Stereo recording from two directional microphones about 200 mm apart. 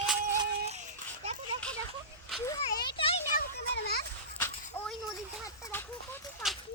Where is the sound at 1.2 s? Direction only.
35° right (ahead or behind).